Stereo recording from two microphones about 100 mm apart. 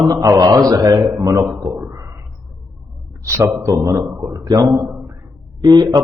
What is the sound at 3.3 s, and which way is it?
Speech, 30° right (ahead or behind).